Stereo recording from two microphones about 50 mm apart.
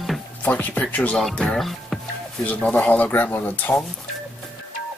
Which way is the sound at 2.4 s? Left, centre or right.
Left.